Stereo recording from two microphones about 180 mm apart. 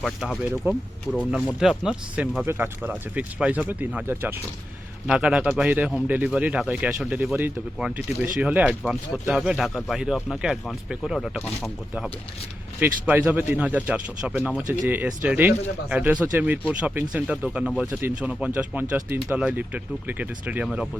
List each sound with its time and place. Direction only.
0.0 s speech: centre (ahead or behind)